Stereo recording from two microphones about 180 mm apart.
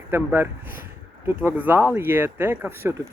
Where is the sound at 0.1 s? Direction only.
10° right (ahead or behind).